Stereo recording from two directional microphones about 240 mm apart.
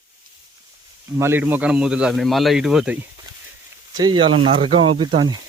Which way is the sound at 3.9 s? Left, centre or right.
Centre.